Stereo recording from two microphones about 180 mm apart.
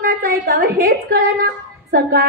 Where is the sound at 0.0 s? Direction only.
55° right (ahead or behind).